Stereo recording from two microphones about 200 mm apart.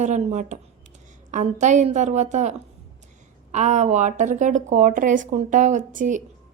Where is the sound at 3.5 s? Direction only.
35° right (ahead or behind).